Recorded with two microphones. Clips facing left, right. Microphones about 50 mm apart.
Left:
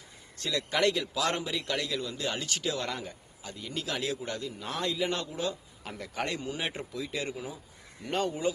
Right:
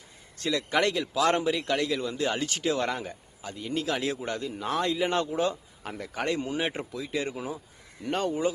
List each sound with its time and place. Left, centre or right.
0.4 s a man's voice: centre
4.6 s a man's voice: centre
4.9 s a man's voice: right
5.8 s a man's voice: centre
6.4 s a man's voice: centre